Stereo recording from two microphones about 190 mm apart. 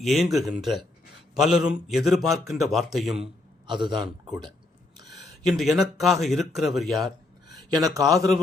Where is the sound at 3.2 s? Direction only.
25° right (ahead or behind).